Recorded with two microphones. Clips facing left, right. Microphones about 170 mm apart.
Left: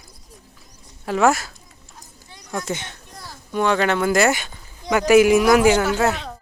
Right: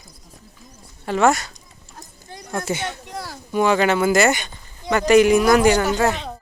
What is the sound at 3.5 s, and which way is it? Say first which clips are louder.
Speech: right 2 dB; 5° right (ahead or behind).